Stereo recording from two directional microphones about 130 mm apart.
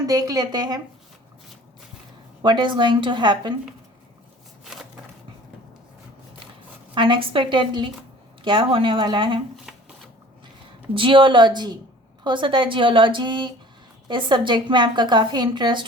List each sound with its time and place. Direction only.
0.0 s a woman's voice: 30° right (ahead or behind)
2.4 s a woman's voice: 35° right (ahead or behind)
6.9 s a woman's voice: 40° right (ahead or behind)
9.6 s shuffling cards: 5° right (ahead or behind)
10.9 s a woman's voice: 40° right (ahead or behind)